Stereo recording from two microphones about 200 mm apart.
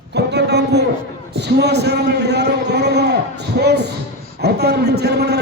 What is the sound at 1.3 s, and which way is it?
A man's voice, 55° right (ahead or behind).